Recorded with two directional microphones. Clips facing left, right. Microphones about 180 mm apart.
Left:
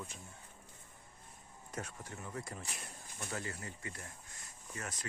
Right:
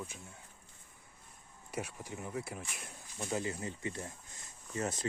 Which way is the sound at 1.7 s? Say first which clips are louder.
Right 4 dB; 10° right (ahead or behind).